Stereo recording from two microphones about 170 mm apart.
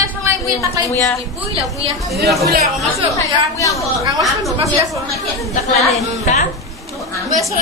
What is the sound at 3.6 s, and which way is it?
Speech, 20° left (ahead or behind).